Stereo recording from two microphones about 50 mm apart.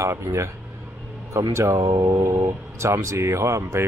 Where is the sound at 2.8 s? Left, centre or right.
Right.